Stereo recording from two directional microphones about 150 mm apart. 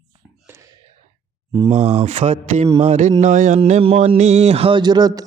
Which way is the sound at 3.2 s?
55° right (ahead or behind).